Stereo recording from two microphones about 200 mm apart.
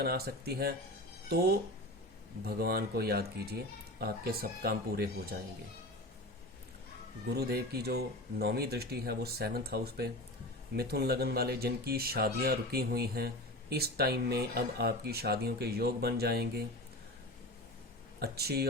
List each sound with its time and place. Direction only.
0.0 s speech: 50° right (ahead or behind)
2.6 s speech: 50° right (ahead or behind)
7.3 s speech: 50° right (ahead or behind)
18.2 s speech: 50° right (ahead or behind)